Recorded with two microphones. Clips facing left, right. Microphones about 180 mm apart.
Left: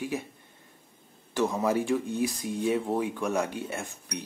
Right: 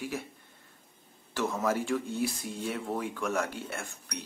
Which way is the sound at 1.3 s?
15° left (ahead or behind).